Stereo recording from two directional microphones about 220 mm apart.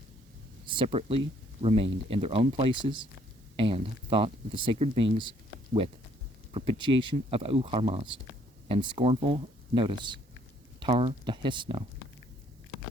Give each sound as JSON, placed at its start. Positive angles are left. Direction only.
{"t": 0.6, "sound": "speech", "side_deg": -20}
{"t": 6.5, "sound": "speech", "side_deg": -20}